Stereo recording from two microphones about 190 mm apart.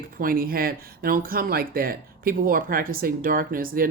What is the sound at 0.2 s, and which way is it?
Speech, 50° right (ahead or behind).